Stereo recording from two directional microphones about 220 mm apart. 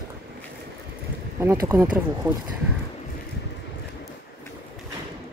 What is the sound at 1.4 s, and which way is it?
Speech, 15° right (ahead or behind).